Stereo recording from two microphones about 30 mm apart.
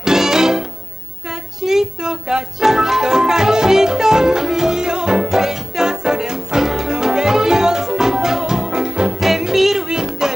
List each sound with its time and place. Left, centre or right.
0.0 s music: centre
1.6 s child singing: centre
2.0 s music: right
9.2 s music: centre
9.8 s music: right